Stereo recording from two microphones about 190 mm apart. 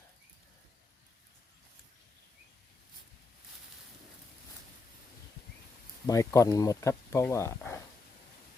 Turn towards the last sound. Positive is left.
turn(degrees=15)  # may be behind; listen again after turning